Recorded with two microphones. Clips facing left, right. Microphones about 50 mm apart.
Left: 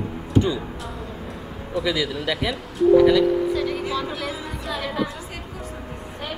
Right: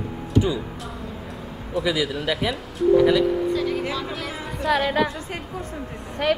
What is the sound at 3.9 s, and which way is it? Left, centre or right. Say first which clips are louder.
Music: left 2 dB; centre.